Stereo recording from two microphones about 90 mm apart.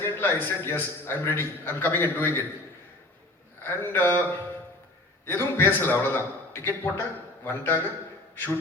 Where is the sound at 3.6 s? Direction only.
25° left (ahead or behind).